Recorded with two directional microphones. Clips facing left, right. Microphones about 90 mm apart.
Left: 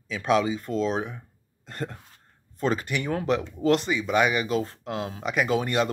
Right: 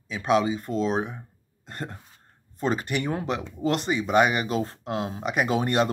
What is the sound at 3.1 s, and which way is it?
Speech, 15° right (ahead or behind).